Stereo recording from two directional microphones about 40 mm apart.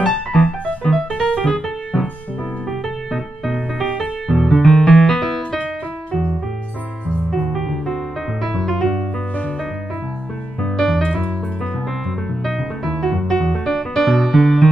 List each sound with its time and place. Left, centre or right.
0.0 s music: centre
3.1 s music: centre
3.8 s music: centre
4.3 s music: centre
7.2 s music: centre
8.7 s music: centre
10.6 s music: centre
12.4 s music: centre